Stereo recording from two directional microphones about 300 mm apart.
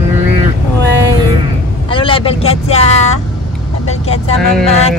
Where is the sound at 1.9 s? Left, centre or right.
Centre.